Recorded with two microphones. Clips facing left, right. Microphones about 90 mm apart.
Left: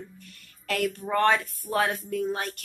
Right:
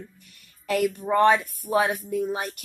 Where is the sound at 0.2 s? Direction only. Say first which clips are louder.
Left 5 dB; 15° right (ahead or behind).